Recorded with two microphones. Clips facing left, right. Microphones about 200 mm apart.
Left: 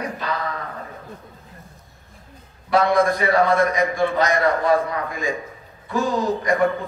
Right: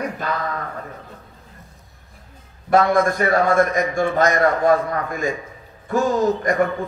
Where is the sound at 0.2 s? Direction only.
50° right (ahead or behind).